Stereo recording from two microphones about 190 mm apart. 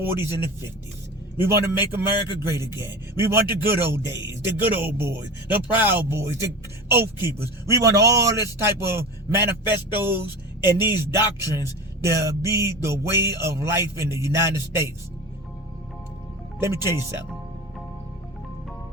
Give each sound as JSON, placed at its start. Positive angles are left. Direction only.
{"t": 0.0, "sound": "speech", "side_deg": -10}
{"t": 16.6, "sound": "speech", "side_deg": -15}